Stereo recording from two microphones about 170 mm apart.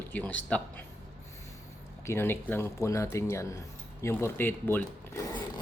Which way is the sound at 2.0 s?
15° left (ahead or behind).